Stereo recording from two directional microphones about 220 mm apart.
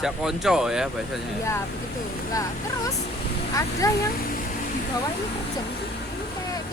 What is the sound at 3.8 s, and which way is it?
Speech, 15° left (ahead or behind).